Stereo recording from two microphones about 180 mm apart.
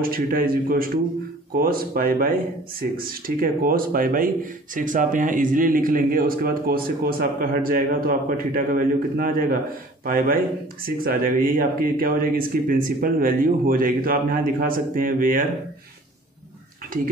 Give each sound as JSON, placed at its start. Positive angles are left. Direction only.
{"t": 0.0, "sound": "a man's voice", "side_deg": -55}
{"t": 16.9, "sound": "speech", "side_deg": -50}